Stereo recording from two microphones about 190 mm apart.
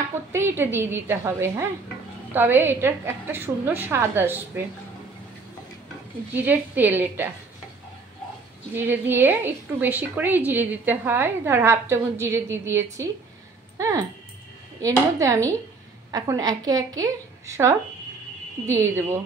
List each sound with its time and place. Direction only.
0.3 s a woman's voice: 10° right (ahead or behind)
6.3 s a woman's voice: 10° right (ahead or behind)
8.7 s a woman's voice: 10° right (ahead or behind)